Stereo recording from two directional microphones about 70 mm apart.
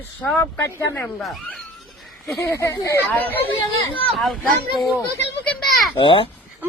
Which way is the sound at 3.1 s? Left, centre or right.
Left.